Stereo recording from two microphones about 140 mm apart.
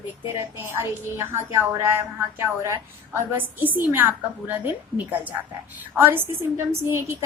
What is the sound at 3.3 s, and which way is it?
A woman's voice, 15° right (ahead or behind).